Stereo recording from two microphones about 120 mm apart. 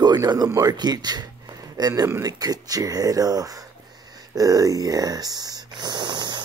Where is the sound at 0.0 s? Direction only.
35° right (ahead or behind).